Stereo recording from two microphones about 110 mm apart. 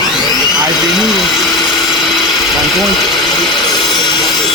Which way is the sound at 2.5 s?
Centre (ahead or behind).